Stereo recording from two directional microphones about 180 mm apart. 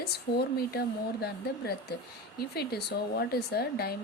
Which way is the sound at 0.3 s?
60° left (ahead or behind).